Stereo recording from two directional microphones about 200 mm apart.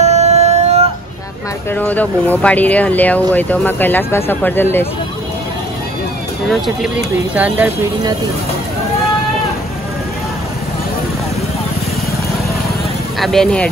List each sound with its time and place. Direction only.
0.0 s music: 35° right (ahead or behind)
1.7 s speech: 10° left (ahead or behind)
6.5 s speech: centre (ahead or behind)
13.2 s speech: centre (ahead or behind)